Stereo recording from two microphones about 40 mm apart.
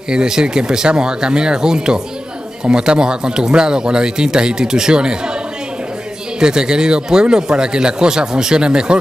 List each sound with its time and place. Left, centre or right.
0.1 s speech: centre
6.4 s speech: centre